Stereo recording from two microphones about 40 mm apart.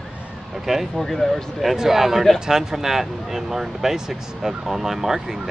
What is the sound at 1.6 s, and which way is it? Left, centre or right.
Speech, centre.